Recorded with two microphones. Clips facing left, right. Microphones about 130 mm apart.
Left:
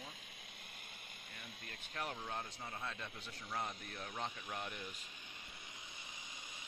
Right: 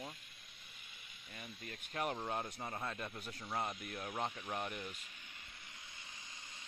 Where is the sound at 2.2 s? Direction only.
30° right (ahead or behind).